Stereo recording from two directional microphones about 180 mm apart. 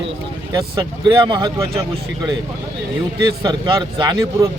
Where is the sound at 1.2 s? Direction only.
25° right (ahead or behind).